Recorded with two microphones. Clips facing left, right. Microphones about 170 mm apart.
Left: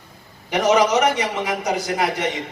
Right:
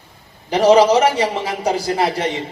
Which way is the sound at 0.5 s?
30° right (ahead or behind).